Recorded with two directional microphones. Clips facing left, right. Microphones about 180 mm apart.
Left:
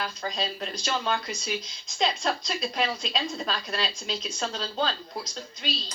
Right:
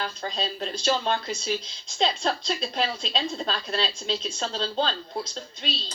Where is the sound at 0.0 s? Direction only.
30° right (ahead or behind).